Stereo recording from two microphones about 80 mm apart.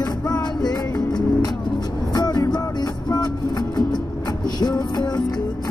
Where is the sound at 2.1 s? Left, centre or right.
Left.